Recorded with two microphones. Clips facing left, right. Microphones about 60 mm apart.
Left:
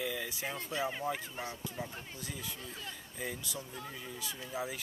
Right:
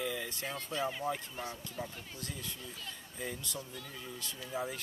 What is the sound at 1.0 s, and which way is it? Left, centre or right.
Speech, centre.